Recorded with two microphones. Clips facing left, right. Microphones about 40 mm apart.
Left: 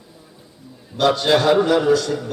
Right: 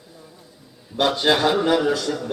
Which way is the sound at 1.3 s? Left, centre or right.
Centre.